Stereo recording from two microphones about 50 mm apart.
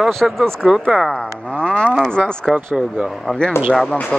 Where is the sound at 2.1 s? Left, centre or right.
Centre.